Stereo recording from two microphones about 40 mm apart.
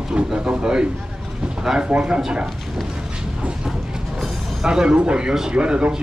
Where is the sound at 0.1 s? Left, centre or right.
Right.